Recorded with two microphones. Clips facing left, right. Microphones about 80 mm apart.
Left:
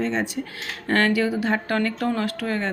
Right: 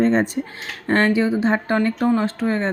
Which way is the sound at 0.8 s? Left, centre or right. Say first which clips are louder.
Right 3 dB; right.